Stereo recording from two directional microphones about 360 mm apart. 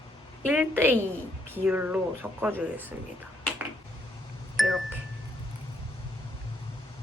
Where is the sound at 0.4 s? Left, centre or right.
Centre.